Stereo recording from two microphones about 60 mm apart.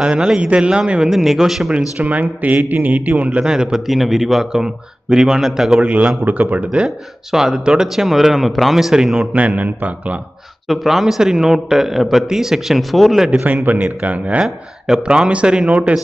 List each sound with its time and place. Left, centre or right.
0.0 s a man's voice: centre
2.0 s a man's voice: right; by 5.8 s centre
5.8 s a man's voice: right
6.7 s a man's voice: centre
9.6 s a man's voice: right
10.7 s speech: centre
13.7 s a man's voice: right
14.4 s a man's voice: centre